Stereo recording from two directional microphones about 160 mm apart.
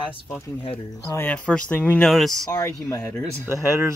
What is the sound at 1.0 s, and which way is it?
Speech, 15° left (ahead or behind).